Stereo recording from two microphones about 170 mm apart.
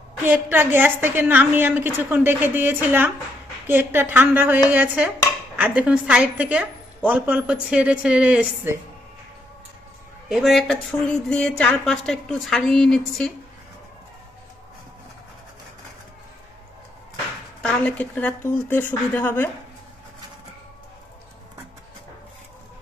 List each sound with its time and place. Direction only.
0.2 s a woman's voice: 10° right (ahead or behind)
10.3 s speech: centre (ahead or behind)
17.6 s speech: 10° left (ahead or behind)